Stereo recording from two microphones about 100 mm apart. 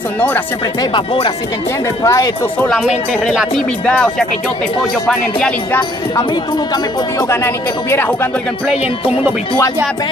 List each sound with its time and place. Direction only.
2.0 s speech: 35° left (ahead or behind)
3.3 s speech: 5° left (ahead or behind)
7.2 s speech: 25° left (ahead or behind)